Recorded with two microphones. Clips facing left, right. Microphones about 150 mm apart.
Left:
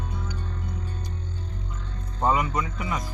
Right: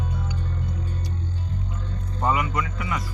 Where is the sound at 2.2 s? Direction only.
25° left (ahead or behind).